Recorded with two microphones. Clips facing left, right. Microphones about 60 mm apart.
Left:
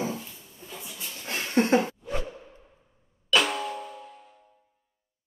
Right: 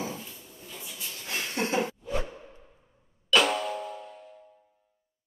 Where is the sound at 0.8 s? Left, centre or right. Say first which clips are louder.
Left 1 dB; left.